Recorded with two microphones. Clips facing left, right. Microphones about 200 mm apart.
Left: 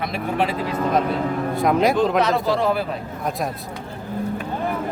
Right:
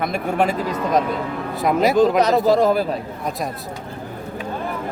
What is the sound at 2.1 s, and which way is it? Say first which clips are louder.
Speech: right 4 dB; 40° right (ahead or behind).